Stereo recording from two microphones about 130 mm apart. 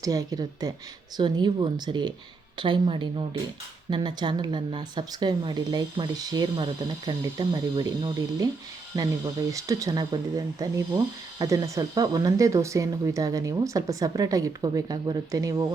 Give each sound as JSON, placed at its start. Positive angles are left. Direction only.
{"t": 0.0, "sound": "speech", "side_deg": -25}